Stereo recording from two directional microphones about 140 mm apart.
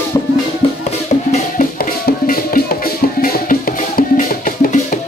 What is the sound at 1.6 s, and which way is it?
Music, 90° left.